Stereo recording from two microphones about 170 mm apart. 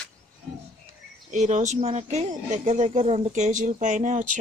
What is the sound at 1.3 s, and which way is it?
Speech, 45° right (ahead or behind).